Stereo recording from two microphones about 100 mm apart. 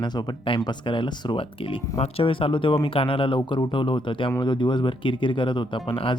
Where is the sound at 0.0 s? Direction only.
55° left (ahead or behind).